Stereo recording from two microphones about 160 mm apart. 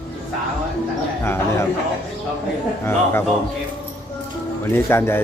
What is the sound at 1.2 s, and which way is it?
Speech, 15° left (ahead or behind).